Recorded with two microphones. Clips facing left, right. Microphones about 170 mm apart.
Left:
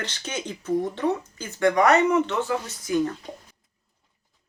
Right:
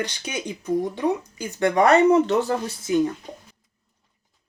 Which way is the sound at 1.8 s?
35° right (ahead or behind).